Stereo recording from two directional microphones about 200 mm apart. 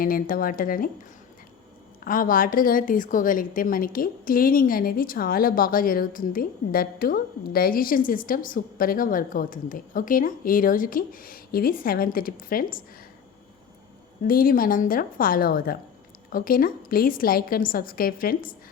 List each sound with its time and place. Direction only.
0.0 s a woman's voice: 45° left (ahead or behind)
2.0 s a woman's voice: 45° left (ahead or behind)
14.3 s a woman's voice: 45° left (ahead or behind)